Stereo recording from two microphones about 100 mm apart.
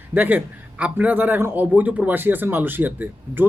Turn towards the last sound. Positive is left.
turn(degrees=-20)  # may be behind; listen again after turning